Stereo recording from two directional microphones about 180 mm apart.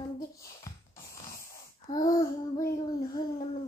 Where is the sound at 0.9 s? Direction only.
20° left (ahead or behind).